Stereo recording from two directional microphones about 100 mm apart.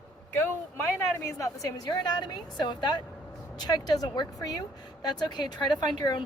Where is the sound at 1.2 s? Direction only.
35° left (ahead or behind).